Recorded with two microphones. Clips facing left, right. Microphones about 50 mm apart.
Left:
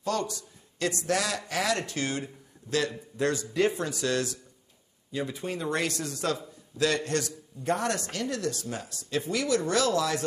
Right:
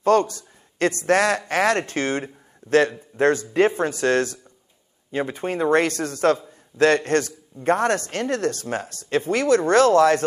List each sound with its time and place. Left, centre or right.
0.0 s a man's voice: right